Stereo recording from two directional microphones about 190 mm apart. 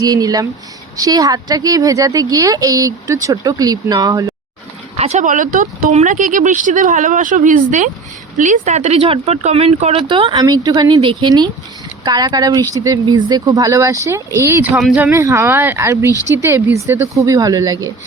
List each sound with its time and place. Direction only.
0.0 s speech: 20° right (ahead or behind)
4.9 s speech: 35° right (ahead or behind); by 17.7 s 20° right (ahead or behind)